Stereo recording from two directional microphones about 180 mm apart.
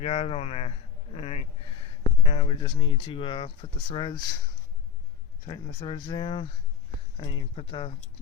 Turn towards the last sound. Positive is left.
turn(degrees=30)  # may be behind; listen again after turning